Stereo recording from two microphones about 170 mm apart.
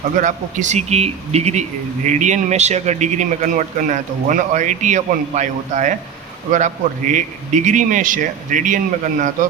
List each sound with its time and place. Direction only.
0.2 s a man's voice: 45° right (ahead or behind)